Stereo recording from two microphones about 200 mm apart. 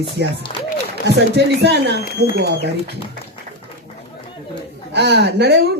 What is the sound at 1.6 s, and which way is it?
Speech, 55° right (ahead or behind).